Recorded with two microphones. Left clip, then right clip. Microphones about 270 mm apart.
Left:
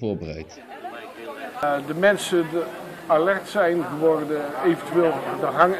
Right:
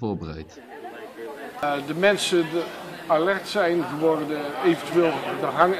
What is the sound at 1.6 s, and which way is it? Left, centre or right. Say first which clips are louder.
A man's voice: left 2 dB; centre.